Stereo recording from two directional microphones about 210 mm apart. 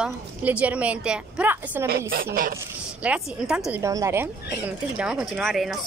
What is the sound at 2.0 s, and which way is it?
Speech, 45° right (ahead or behind).